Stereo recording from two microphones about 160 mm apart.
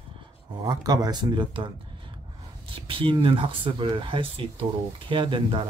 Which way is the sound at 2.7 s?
35° right (ahead or behind).